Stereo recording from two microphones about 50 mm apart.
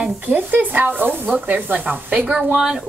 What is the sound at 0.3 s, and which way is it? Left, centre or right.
Speech, right.